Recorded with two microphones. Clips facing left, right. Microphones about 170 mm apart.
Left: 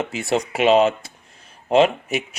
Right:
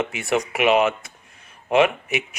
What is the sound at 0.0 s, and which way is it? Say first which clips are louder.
Speech: left 1 dB; 30° left (ahead or behind).